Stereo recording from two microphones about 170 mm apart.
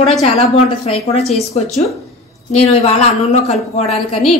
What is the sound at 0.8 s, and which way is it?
A woman's voice, 35° left (ahead or behind).